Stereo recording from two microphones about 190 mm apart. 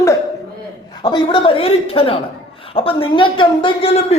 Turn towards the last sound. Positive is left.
turn(degrees=30)  # may be behind; listen again after turning